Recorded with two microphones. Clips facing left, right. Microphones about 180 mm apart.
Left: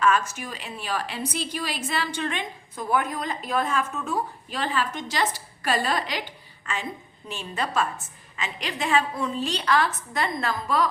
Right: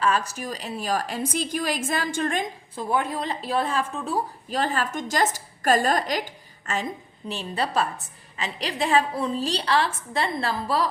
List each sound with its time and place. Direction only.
0.0 s a woman's voice: 35° right (ahead or behind)
2.7 s a woman's voice: 30° right (ahead or behind)